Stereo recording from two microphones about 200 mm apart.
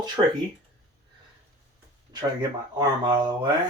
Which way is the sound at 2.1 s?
20° right (ahead or behind).